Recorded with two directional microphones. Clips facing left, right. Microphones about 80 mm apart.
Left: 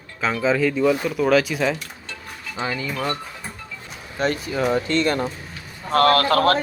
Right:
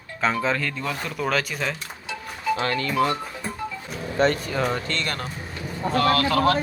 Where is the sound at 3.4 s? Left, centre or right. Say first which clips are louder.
Right 5 dB; centre.